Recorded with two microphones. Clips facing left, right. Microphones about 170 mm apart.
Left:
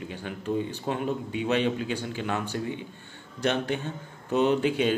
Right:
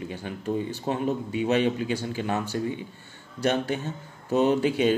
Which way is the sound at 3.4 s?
40° right (ahead or behind).